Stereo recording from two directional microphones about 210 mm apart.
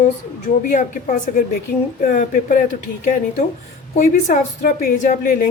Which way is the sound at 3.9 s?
40° left (ahead or behind).